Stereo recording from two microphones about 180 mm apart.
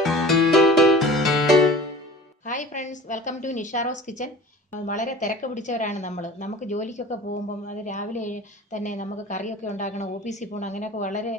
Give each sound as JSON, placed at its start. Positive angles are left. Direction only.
{"t": 0.0, "sound": "music", "side_deg": 0}
{"t": 2.4, "sound": "a woman's voice", "side_deg": 45}